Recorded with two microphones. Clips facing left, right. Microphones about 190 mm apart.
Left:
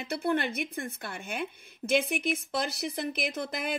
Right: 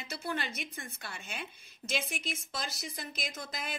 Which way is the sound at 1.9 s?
60° left (ahead or behind).